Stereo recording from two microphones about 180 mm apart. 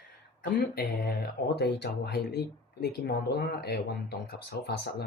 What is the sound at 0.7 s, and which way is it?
Speech, 60° left (ahead or behind).